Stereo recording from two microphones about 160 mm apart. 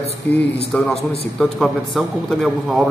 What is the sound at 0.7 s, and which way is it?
A man's voice, 10° left (ahead or behind).